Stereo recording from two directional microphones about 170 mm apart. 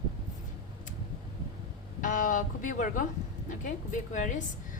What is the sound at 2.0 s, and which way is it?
A woman's voice, 50° left (ahead or behind).